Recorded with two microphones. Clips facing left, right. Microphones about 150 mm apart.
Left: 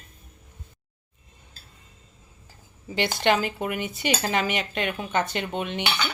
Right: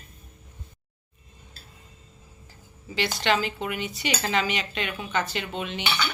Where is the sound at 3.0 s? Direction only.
50° left (ahead or behind).